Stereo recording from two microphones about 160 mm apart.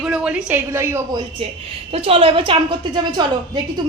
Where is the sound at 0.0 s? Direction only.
5° right (ahead or behind).